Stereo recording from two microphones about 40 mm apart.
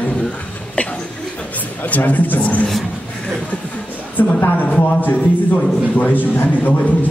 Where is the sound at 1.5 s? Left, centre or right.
Left.